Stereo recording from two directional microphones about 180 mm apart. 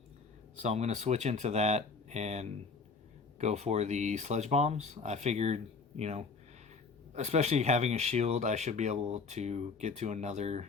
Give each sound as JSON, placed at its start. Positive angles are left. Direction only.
{"t": 0.5, "sound": "speech", "side_deg": -40}